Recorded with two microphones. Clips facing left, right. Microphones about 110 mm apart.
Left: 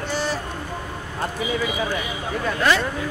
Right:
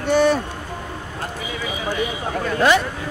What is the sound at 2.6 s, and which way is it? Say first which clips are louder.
Speech: right 4 dB; 20° right (ahead or behind).